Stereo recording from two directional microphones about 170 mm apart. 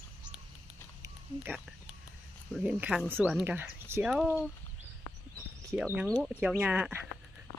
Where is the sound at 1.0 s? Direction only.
10° right (ahead or behind).